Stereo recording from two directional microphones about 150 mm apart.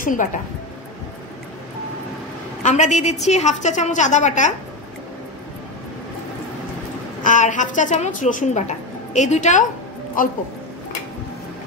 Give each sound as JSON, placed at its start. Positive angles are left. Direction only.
{"t": 0.0, "sound": "a woman's voice", "side_deg": 60}
{"t": 2.6, "sound": "a woman's voice", "side_deg": 50}
{"t": 7.2, "sound": "a woman's voice", "side_deg": 55}
{"t": 10.2, "sound": "speech", "side_deg": 65}